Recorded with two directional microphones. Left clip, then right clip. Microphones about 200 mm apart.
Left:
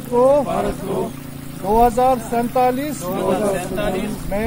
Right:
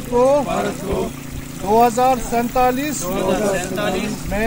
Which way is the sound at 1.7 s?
15° left (ahead or behind).